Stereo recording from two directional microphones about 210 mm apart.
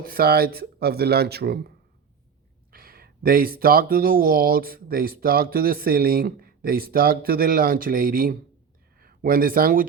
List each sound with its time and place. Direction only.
0.1 s speech: 45° right (ahead or behind)
2.7 s speech: 45° right (ahead or behind)